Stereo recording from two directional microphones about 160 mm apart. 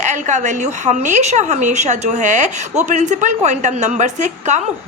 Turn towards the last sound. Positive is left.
turn(degrees=-50)  # may be behind; listen again after turning